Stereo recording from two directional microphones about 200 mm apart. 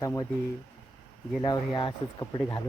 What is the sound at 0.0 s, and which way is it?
Speech, 15° left (ahead or behind).